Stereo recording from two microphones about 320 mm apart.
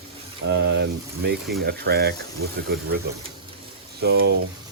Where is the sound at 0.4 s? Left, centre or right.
Right.